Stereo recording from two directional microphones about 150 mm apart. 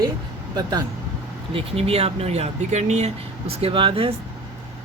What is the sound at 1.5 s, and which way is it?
Speech, 40° right (ahead or behind).